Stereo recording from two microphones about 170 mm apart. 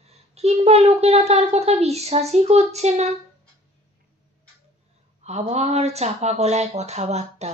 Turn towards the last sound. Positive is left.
turn(degrees=-40)  # may be behind; listen again after turning